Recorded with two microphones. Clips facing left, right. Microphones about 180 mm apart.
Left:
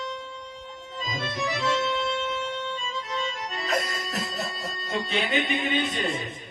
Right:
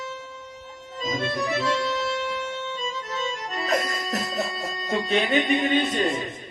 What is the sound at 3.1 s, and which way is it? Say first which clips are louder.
Music: right 1 dB; 40° right (ahead or behind).